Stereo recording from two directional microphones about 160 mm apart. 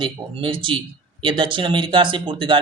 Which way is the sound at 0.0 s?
30° right (ahead or behind).